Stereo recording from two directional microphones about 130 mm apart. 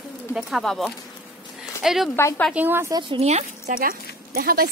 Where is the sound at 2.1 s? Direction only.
20° left (ahead or behind).